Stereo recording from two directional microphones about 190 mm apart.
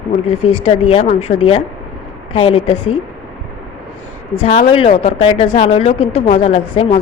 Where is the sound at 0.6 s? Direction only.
30° left (ahead or behind).